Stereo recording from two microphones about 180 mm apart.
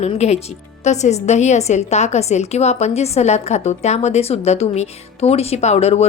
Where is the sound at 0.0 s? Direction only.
35° left (ahead or behind).